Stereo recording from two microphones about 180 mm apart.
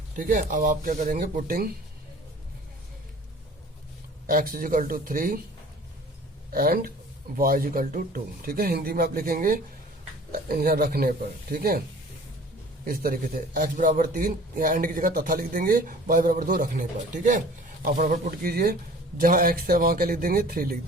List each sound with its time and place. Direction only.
0.2 s a man's voice: 45° right (ahead or behind)
4.3 s a man's voice: 50° right (ahead or behind)
6.5 s a man's voice: 55° right (ahead or behind)
12.8 s a man's voice: 55° right (ahead or behind)
17.8 s a man's voice: 50° right (ahead or behind)